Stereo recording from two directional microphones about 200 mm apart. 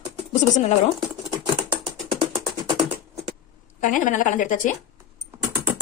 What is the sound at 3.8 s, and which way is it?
Speech, 40° left (ahead or behind).